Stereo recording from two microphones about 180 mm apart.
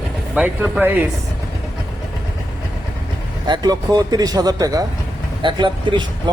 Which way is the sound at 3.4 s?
25° right (ahead or behind).